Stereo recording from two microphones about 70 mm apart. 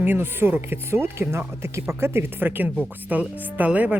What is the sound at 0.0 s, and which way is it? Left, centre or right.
Speech, right.